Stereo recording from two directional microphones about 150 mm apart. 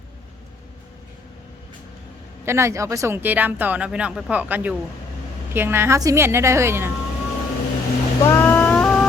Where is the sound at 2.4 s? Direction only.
15° right (ahead or behind).